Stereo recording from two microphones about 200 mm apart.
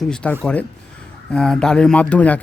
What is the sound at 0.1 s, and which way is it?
A man's voice, 5° left (ahead or behind).